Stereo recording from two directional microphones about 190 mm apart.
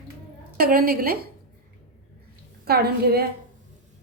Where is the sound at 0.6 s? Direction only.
50° right (ahead or behind).